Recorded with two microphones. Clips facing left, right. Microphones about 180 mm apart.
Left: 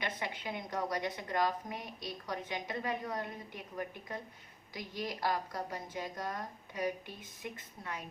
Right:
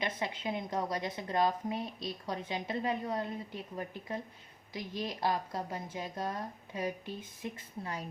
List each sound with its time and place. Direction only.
0.0 s a woman's voice: 25° right (ahead or behind)